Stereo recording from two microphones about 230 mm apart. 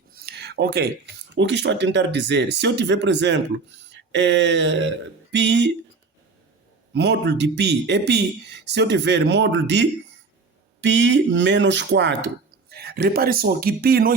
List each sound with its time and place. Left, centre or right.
0.1 s speech: right
6.9 s speech: right